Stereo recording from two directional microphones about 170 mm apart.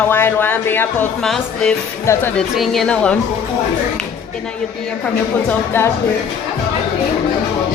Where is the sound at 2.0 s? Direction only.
15° left (ahead or behind).